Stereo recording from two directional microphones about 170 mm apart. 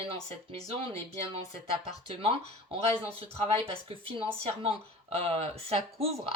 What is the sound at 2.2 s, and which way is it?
Speech, 30° right (ahead or behind).